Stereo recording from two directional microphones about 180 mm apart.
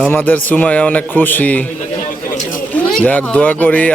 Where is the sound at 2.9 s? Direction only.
10° left (ahead or behind).